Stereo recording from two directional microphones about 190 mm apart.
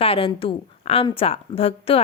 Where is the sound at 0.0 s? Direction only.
30° left (ahead or behind).